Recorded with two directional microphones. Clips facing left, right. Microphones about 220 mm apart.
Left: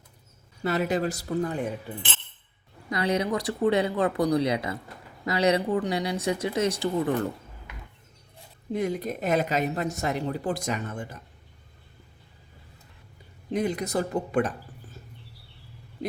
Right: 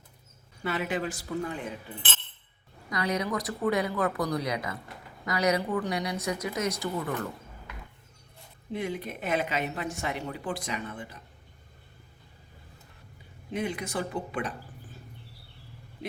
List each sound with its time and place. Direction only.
0.6 s speech: 40° left (ahead or behind)
2.9 s speech: 30° left (ahead or behind)
8.7 s speech: 40° left (ahead or behind)
13.5 s speech: 40° left (ahead or behind)